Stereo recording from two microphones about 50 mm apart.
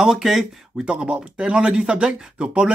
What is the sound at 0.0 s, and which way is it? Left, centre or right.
Speech, centre.